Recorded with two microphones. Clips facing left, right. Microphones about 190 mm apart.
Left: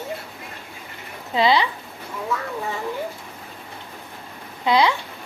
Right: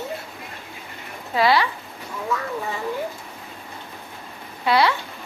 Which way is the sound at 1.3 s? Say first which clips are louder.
Even; 20° left (ahead or behind).